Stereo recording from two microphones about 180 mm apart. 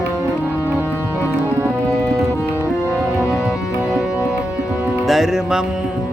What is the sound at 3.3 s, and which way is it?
Music, 5° right (ahead or behind).